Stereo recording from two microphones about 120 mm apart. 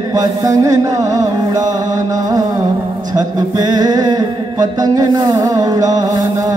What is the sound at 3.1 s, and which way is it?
A man's voice, 35° right (ahead or behind).